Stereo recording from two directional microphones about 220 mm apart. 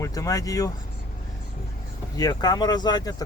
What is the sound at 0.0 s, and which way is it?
Speech, 15° left (ahead or behind).